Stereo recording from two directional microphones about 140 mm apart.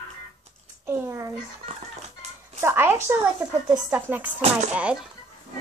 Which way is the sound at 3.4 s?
25° right (ahead or behind).